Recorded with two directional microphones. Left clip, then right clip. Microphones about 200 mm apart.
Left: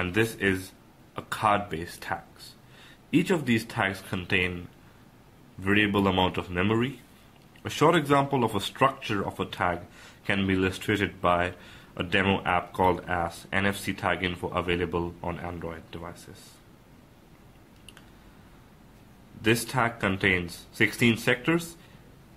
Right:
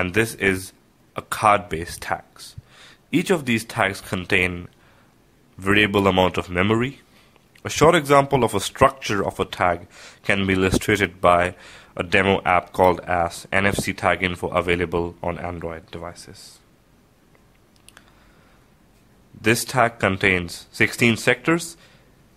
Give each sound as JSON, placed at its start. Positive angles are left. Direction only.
{"t": 0.0, "sound": "speech", "side_deg": -45}
{"t": 5.6, "sound": "speech", "side_deg": -45}
{"t": 19.4, "sound": "speech", "side_deg": -40}